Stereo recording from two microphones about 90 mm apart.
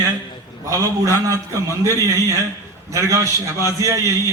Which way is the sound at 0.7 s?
40° right (ahead or behind).